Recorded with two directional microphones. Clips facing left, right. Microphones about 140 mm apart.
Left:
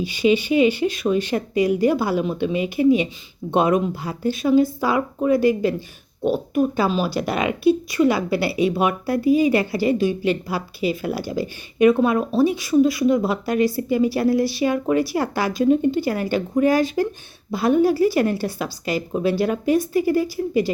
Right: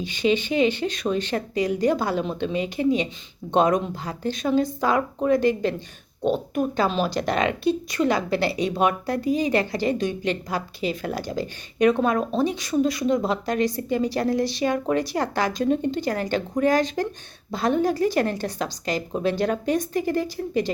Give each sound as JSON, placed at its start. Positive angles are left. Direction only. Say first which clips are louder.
{"t": 0.0, "sound": "speech", "louder": "left 4 dB", "side_deg": 10}